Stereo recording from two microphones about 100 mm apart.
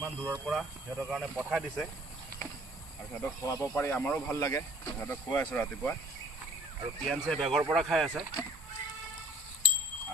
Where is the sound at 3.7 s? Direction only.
20° left (ahead or behind).